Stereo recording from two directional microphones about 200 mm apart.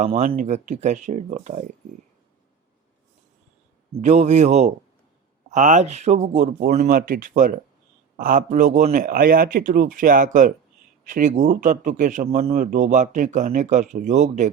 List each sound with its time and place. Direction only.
0.0 s a man's voice: 35° right (ahead or behind)
4.0 s a man's voice: 35° right (ahead or behind)